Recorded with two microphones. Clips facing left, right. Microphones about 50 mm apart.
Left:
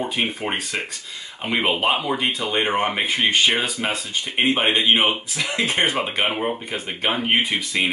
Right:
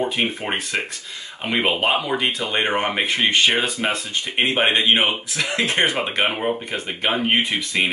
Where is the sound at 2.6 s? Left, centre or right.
Centre.